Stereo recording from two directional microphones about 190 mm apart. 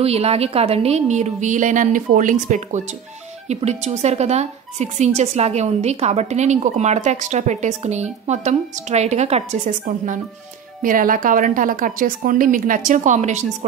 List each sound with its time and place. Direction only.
0.0 s a woman's voice: 35° right (ahead or behind)